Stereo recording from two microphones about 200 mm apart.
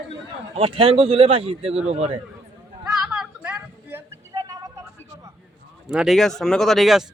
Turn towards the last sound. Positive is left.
turn(degrees=0)  # may be behind; listen again after turning